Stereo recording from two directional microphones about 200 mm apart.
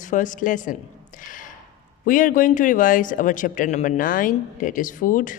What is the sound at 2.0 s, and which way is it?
Speech, 40° left (ahead or behind).